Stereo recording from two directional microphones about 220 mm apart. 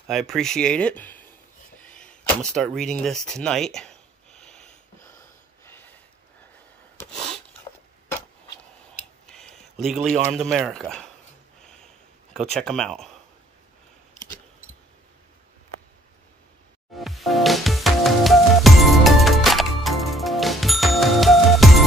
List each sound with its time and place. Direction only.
0.0 s speech: centre (ahead or behind)
1.8 s arrow: 5° left (ahead or behind)
5.7 s a sound: 10° left (ahead or behind)
7.0 s a sound: 5° left (ahead or behind)
9.2 s tick-tock: centre (ahead or behind)
9.9 s a man's voice: 35° right (ahead or behind)
10.3 s speech: centre (ahead or behind)
11.6 s a sound: 5° left (ahead or behind)
12.4 s speech: centre (ahead or behind)
16.9 s music: centre (ahead or behind)